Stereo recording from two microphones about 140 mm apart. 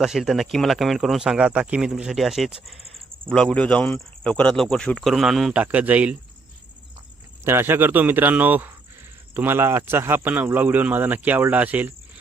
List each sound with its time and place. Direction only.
0.0 s speech: centre (ahead or behind)
7.4 s speech: 15° right (ahead or behind)